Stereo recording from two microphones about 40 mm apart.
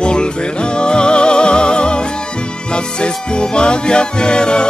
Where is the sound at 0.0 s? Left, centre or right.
Left.